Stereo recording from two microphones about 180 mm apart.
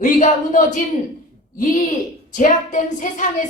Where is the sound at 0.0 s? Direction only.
45° left (ahead or behind).